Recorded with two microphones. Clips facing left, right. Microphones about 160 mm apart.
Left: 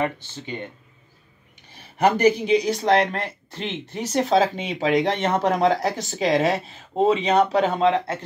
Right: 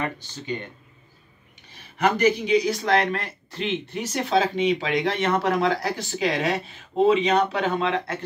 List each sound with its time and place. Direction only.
0.0 s speech: 20° left (ahead or behind)
2.0 s speech: 30° left (ahead or behind)